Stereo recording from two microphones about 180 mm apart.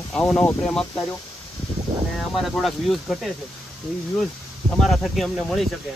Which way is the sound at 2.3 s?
Centre (ahead or behind).